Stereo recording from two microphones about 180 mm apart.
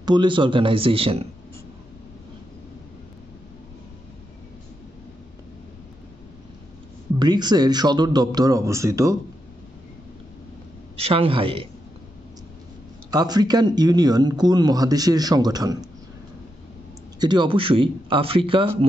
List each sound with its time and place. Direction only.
0.0 s speech: 25° right (ahead or behind)
7.2 s speech: 25° right (ahead or behind)
11.0 s a man's voice: 30° right (ahead or behind)
13.1 s speech: 20° right (ahead or behind)
17.2 s speech: 25° right (ahead or behind)